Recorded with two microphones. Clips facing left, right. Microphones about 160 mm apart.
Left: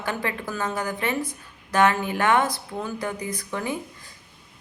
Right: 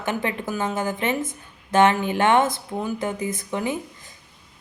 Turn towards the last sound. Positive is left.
turn(degrees=-20)  # may be behind; listen again after turning